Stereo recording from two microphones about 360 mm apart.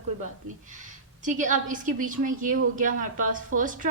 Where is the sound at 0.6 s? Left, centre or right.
Right.